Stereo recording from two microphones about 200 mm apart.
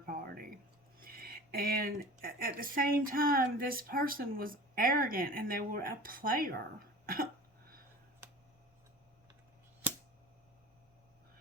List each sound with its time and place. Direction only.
0.0 s a sound: 45° right (ahead or behind)
0.9 s speech: 50° right (ahead or behind)
7.0 s cough: 45° right (ahead or behind)